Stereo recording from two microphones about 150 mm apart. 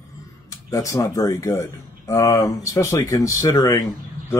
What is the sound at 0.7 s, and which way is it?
Speech, 20° left (ahead or behind).